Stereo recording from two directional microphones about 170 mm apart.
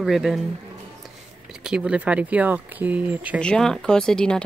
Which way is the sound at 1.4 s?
5° right (ahead or behind).